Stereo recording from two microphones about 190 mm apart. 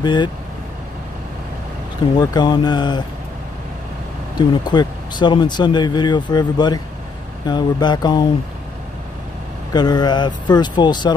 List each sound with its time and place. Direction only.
0.0 s speech: 25° left (ahead or behind)
2.1 s speech: 20° left (ahead or behind)
4.4 s speech: 25° left (ahead or behind)
9.7 s speech: 20° left (ahead or behind)